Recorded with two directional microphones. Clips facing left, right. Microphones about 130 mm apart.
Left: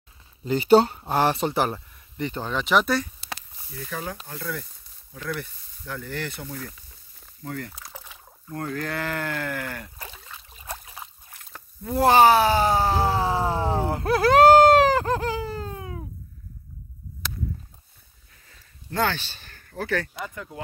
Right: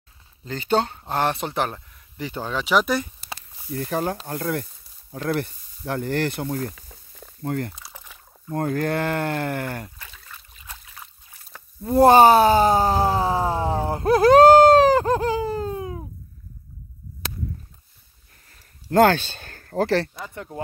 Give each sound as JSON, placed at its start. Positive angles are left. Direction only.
{"t": 0.5, "sound": "speech", "side_deg": 10}
{"t": 2.9, "sound": "speech", "side_deg": -20}
{"t": 3.7, "sound": "speech", "side_deg": -55}
{"t": 7.4, "sound": "speech", "side_deg": -50}
{"t": 9.9, "sound": "a sound", "side_deg": 35}
{"t": 10.5, "sound": "trickle", "side_deg": 35}
{"t": 11.8, "sound": "speech", "side_deg": -30}
{"t": 13.5, "sound": "a sound", "side_deg": -35}
{"t": 15.0, "sound": "a sound", "side_deg": -20}
{"t": 18.9, "sound": "speech", "side_deg": -50}